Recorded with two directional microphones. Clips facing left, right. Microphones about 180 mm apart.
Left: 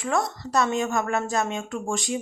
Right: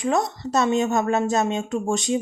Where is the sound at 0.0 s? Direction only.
20° right (ahead or behind).